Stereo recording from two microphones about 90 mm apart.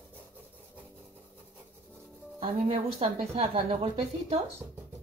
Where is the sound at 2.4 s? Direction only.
75° right (ahead or behind).